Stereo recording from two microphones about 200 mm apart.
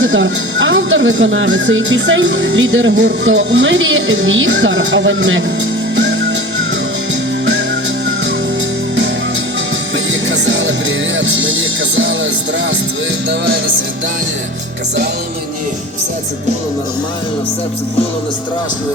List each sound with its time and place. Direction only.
0.0 s speech: 70° right (ahead or behind)
6.0 s music: 65° right (ahead or behind)
10.1 s music: 65° right (ahead or behind)